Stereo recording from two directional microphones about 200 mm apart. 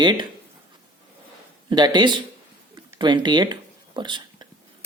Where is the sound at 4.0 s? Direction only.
25° right (ahead or behind).